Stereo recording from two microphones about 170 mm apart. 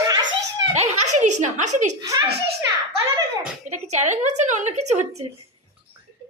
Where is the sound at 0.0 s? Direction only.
20° right (ahead or behind).